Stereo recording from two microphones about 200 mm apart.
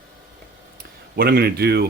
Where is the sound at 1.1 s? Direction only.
50° right (ahead or behind).